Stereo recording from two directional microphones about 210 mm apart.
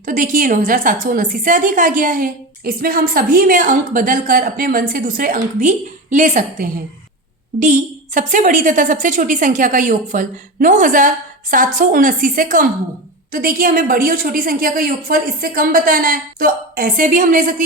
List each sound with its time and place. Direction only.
0.0 s a woman's voice: 40° right (ahead or behind)